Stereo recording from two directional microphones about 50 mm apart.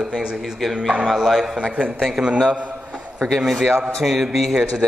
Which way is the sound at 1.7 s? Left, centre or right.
Right.